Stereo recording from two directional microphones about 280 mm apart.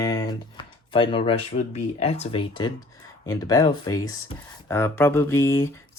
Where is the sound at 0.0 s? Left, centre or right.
Centre.